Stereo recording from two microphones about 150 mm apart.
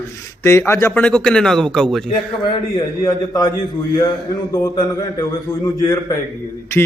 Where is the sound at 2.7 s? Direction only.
25° left (ahead or behind).